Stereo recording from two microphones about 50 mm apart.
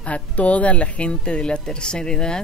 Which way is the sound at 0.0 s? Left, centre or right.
Left.